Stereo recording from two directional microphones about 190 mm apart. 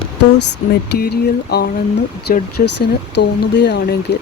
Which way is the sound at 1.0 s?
55° left (ahead or behind).